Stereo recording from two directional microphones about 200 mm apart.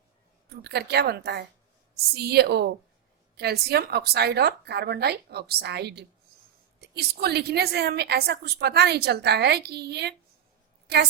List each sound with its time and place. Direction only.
0.5 s a woman's voice: 55° right (ahead or behind)